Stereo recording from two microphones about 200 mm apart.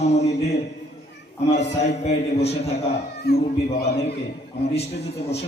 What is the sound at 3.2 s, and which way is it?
Speech, 55° left (ahead or behind).